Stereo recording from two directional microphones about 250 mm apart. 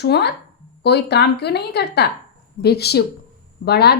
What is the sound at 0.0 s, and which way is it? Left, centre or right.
A woman's voice, left.